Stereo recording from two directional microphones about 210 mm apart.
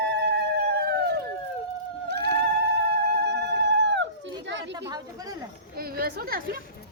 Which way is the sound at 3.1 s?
55° right (ahead or behind).